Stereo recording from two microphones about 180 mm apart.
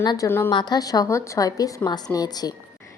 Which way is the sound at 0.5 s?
25° left (ahead or behind).